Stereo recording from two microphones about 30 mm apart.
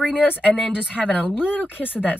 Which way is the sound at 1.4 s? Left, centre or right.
Left.